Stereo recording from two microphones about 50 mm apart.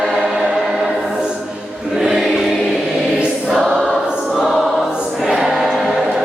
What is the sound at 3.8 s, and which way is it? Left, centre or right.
Choir, centre.